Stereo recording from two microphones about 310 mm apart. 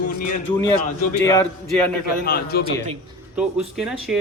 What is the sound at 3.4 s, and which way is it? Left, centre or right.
Speech, centre.